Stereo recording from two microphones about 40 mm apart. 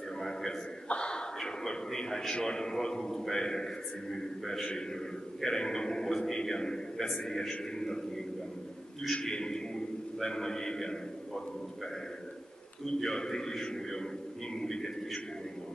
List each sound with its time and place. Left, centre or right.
0.2 s a sound: centre
0.8 s a man's voice: left
9.1 s a man's voice: centre
13.0 s a man's voice: centre